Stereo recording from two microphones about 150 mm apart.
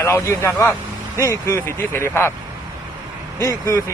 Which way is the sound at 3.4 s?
20° left (ahead or behind).